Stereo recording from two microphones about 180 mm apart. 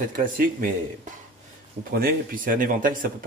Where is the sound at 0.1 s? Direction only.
50° right (ahead or behind).